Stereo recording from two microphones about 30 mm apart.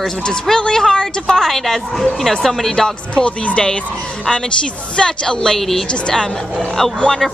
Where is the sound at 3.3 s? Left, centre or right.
Left.